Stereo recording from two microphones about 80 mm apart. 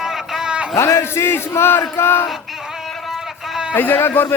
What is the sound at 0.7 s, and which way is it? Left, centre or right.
Speech, left.